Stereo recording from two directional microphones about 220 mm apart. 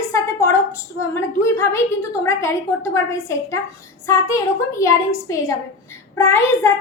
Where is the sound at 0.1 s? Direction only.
15° left (ahead or behind).